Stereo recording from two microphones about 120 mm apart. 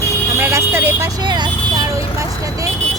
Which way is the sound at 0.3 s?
20° right (ahead or behind).